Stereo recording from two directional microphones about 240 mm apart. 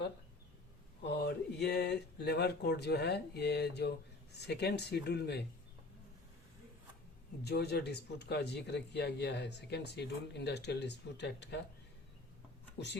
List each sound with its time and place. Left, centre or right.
1.0 s speech: left
7.4 s a man's voice: left